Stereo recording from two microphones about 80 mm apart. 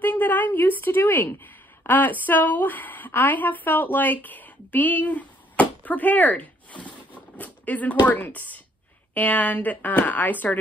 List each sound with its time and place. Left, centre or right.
0.0 s a woman's voice: left